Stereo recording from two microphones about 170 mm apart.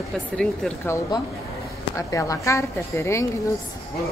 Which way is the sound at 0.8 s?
20° left (ahead or behind).